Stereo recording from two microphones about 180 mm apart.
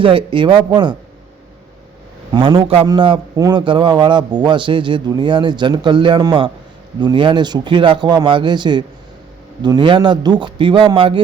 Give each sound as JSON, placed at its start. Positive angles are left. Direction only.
{"t": 0.0, "sound": "a man's voice", "side_deg": -30}
{"t": 2.3, "sound": "a man's voice", "side_deg": -25}